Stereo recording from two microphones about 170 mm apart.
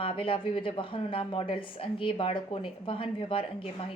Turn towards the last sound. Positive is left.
turn(degrees=30)  # may be behind; listen again after turning